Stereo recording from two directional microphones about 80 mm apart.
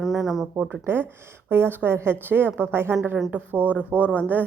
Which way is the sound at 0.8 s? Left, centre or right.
Right.